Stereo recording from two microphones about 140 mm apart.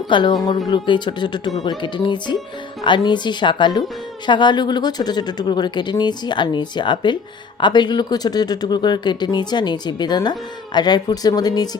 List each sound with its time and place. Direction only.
0.1 s speech: 35° left (ahead or behind)